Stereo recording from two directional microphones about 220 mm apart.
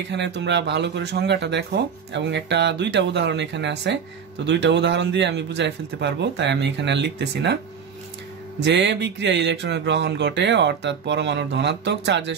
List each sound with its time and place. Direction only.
0.1 s speech: 50° right (ahead or behind)
8.6 s speech: 55° right (ahead or behind)